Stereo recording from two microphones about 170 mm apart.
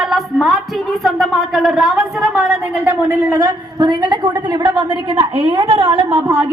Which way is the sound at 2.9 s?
10° right (ahead or behind).